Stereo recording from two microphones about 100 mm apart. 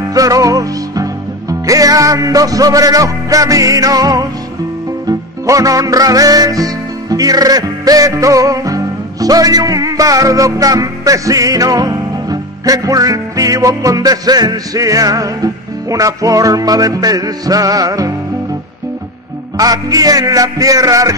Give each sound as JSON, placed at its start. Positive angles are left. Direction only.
{"t": 0.1, "sound": "music", "side_deg": -35}
{"t": 19.5, "sound": "music", "side_deg": -40}